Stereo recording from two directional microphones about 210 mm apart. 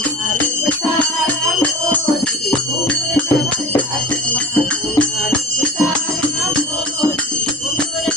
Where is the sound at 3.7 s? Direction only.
5° left (ahead or behind).